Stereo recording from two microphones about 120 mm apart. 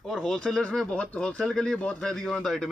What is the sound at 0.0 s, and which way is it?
Speech, 5° left (ahead or behind).